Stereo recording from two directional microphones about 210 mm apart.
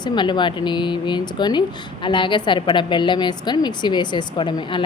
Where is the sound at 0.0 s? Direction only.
20° left (ahead or behind).